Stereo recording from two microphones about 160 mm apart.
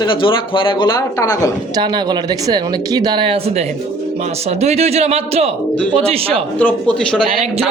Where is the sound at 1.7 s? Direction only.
25° right (ahead or behind).